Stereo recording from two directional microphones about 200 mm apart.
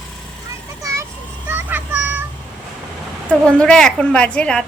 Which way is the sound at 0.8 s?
15° right (ahead or behind).